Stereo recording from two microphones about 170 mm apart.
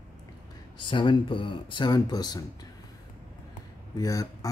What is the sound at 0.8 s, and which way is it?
Speech, 30° left (ahead or behind).